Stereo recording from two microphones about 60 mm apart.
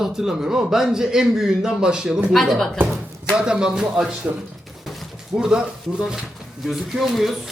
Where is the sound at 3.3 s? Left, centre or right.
Centre.